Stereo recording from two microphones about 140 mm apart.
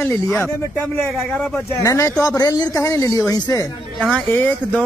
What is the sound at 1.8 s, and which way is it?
A woman's voice, 25° left (ahead or behind).